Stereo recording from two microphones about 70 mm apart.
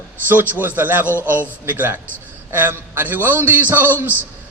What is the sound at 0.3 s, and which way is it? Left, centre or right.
A man's voice, right.